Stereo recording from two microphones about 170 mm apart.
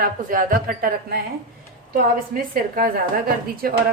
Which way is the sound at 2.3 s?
60° right (ahead or behind).